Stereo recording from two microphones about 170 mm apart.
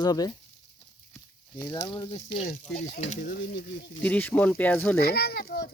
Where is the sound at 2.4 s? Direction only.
45° left (ahead or behind).